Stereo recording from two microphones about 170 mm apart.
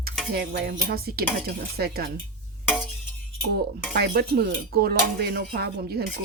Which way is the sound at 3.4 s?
75° right (ahead or behind).